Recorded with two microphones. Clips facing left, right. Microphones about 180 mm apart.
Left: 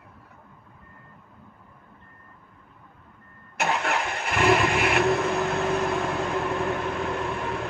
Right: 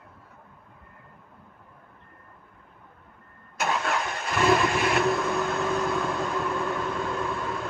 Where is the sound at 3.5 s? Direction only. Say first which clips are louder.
Left 1 dB; 65° left (ahead or behind).